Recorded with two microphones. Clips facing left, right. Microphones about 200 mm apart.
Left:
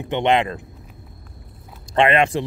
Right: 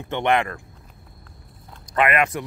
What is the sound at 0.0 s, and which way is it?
Speech, 20° left (ahead or behind).